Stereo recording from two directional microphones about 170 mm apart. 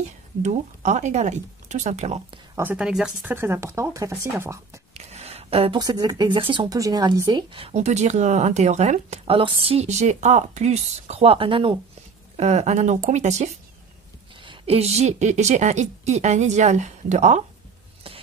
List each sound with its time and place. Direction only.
0.4 s a woman's voice: 45° right (ahead or behind)
2.5 s speech: 10° right (ahead or behind)
4.9 s a sound: 40° right (ahead or behind)
5.8 s a woman's voice: 25° right (ahead or behind); by 17.4 s 45° right (ahead or behind)